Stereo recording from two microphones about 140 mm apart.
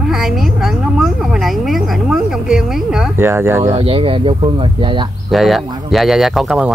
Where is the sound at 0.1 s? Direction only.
Centre (ahead or behind).